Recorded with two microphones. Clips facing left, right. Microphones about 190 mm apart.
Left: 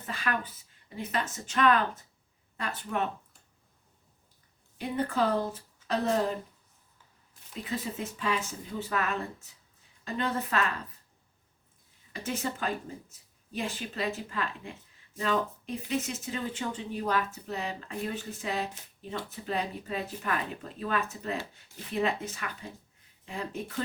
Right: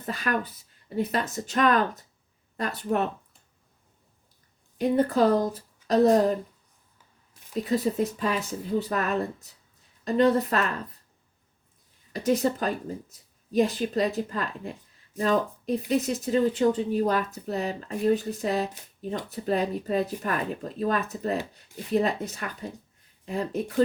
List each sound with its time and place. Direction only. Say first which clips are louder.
0.0 s speech: right 5 dB; 40° right (ahead or behind)
4.8 s speech: right 7 dB; 40° right (ahead or behind)
7.5 s speech: right 10 dB; 40° right (ahead or behind)
12.1 s speech: right 10 dB; 40° right (ahead or behind)